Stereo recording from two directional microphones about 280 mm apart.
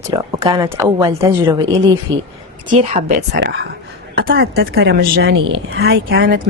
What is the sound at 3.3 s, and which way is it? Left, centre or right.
Speech, right.